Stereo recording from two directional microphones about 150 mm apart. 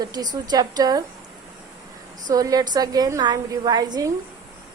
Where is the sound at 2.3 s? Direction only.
25° right (ahead or behind).